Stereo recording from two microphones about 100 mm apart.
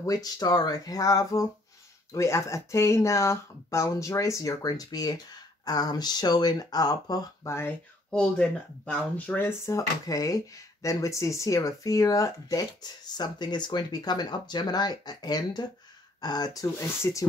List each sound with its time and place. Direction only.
0.0 s speech: 40° left (ahead or behind)
7.4 s speech: 25° left (ahead or behind)
8.1 s speech: 10° left (ahead or behind); by 16.7 s 40° left (ahead or behind)
16.7 s speech: 30° left (ahead or behind)